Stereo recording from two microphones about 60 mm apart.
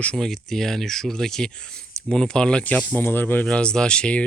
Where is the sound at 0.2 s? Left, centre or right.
Centre.